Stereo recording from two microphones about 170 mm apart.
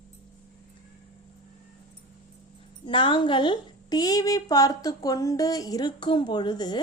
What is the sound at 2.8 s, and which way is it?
A woman's voice, 30° left (ahead or behind).